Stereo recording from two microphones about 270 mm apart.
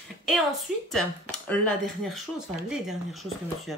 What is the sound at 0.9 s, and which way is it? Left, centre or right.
Speech, centre.